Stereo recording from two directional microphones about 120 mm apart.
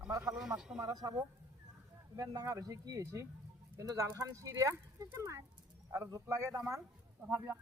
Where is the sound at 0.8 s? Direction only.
30° right (ahead or behind).